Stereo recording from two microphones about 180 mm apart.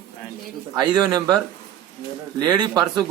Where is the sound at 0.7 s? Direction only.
20° right (ahead or behind).